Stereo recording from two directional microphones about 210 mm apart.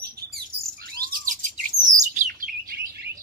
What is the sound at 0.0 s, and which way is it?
Bird, 45° right (ahead or behind).